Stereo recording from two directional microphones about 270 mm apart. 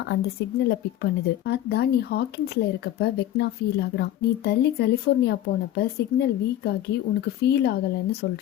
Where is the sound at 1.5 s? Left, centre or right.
Left.